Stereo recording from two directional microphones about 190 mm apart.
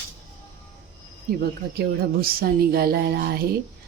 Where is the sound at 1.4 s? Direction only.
55° right (ahead or behind).